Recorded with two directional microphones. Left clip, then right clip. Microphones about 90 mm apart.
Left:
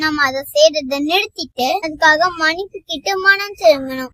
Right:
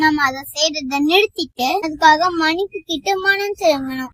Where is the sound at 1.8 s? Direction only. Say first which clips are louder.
Right 1 dB; 30° left (ahead or behind).